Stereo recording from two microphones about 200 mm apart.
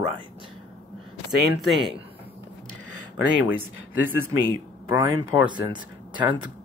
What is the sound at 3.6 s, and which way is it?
Speech, 90° right.